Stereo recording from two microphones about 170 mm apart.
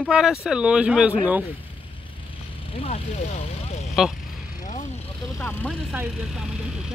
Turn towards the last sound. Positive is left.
turn(degrees=-5)  # may be behind; listen again after turning